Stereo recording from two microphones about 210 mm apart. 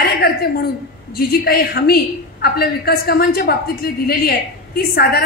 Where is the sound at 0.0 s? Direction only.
45° left (ahead or behind).